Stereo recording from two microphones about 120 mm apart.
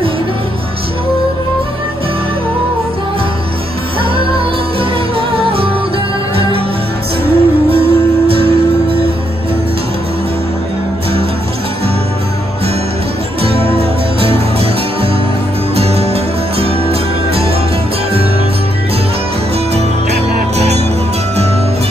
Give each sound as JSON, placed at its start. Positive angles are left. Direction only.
{"t": 4.0, "sound": "music", "side_deg": -50}
{"t": 7.2, "sound": "music", "side_deg": -55}
{"t": 13.4, "sound": "music", "side_deg": -55}
{"t": 20.5, "sound": "music", "side_deg": -65}